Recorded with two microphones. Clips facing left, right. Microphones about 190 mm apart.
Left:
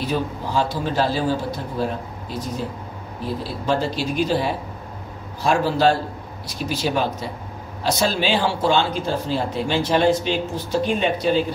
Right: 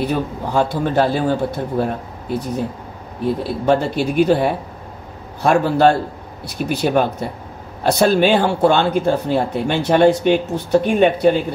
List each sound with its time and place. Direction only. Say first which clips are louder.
0.0 s speech: right 4 dB; 55° right (ahead or behind)
3.6 s speech: right 6 dB; 60° right (ahead or behind)